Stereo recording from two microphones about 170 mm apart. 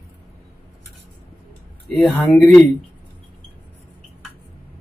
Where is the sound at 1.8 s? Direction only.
Centre (ahead or behind).